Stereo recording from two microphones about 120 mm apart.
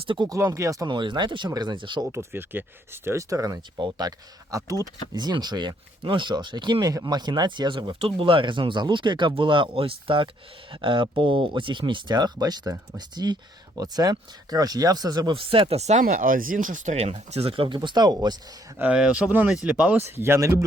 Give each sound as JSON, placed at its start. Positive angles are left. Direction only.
{"t": 0.0, "sound": "speech", "side_deg": -45}
{"t": 0.3, "sound": "speech", "side_deg": -25}
{"t": 0.9, "sound": "speech", "side_deg": -40}
{"t": 2.0, "sound": "speech", "side_deg": -20}
{"t": 15.4, "sound": "speech", "side_deg": -45}
{"t": 15.8, "sound": "speech", "side_deg": -70}
{"t": 18.8, "sound": "speech", "side_deg": -10}